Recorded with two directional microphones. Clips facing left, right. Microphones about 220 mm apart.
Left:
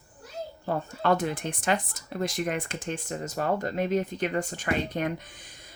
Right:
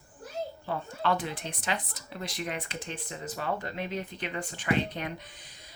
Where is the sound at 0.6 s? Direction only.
45° left (ahead or behind).